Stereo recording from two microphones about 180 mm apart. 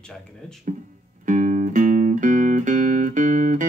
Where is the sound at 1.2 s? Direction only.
45° right (ahead or behind).